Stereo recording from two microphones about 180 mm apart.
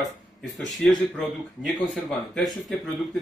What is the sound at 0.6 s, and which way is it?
Speech, centre (ahead or behind).